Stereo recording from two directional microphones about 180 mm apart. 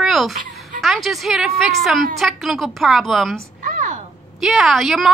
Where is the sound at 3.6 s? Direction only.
45° right (ahead or behind).